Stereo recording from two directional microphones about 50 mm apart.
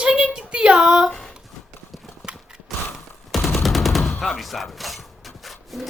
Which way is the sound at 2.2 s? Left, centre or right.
Centre.